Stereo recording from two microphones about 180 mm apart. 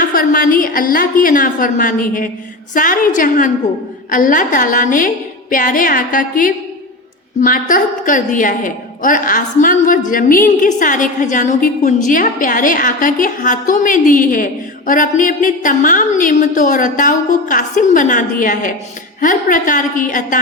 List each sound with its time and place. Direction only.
0.0 s a woman's voice: 50° left (ahead or behind)